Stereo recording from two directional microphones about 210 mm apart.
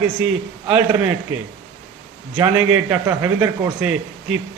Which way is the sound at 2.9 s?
10° right (ahead or behind).